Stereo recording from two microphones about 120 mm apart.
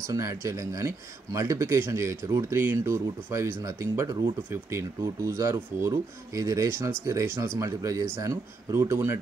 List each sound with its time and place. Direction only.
0.1 s speech: 25° right (ahead or behind)